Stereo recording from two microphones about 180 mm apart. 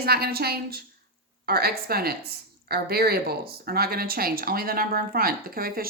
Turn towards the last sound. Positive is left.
turn(degrees=-55)  # may be behind; listen again after turning